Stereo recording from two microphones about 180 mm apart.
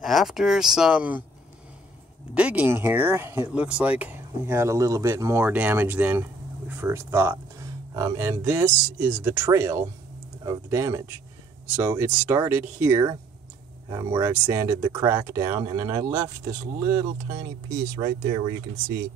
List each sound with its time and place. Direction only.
0.0 s speech: centre (ahead or behind)
2.3 s speech: 5° right (ahead or behind); by 18.5 s 25° right (ahead or behind)